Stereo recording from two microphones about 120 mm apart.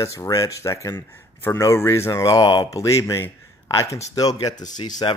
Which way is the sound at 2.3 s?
35° left (ahead or behind).